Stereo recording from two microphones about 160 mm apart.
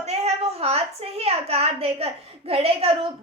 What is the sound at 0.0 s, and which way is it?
A woman's voice, 40° right (ahead or behind).